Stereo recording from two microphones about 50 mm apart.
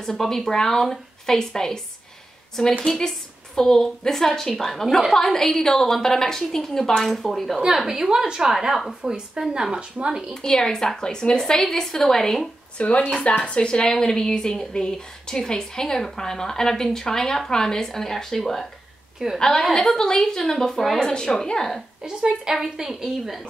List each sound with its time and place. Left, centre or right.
0.0 s a woman's voice: centre
2.8 s a woman's voice: centre
7.6 s a woman's voice: centre
9.5 s a woman's voice: centre
10.3 s a woman's voice: centre
12.7 s a woman's voice: left; by 21.8 s centre
22.0 s a woman's voice: centre